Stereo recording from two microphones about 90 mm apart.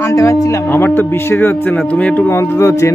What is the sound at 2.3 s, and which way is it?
Speech, 30° left (ahead or behind).